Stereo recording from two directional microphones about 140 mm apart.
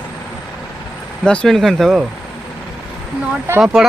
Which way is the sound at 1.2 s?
5° left (ahead or behind).